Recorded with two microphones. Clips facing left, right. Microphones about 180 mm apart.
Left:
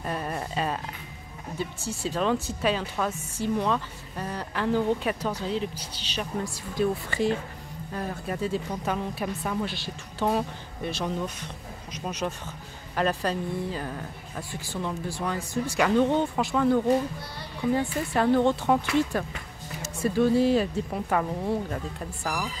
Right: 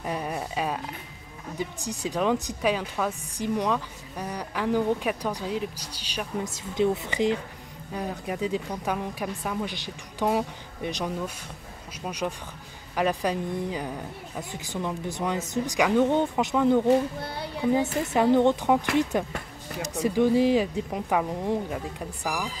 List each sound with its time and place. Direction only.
0.0 s a woman's voice: 10° right (ahead or behind)
9.7 s speech: 15° right (ahead or behind)
18.0 s speech: 20° right (ahead or behind)